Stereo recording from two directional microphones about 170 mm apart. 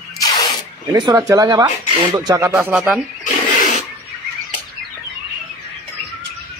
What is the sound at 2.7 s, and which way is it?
Speech, 5° right (ahead or behind).